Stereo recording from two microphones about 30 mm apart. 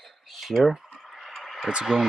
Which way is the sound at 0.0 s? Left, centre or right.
Centre.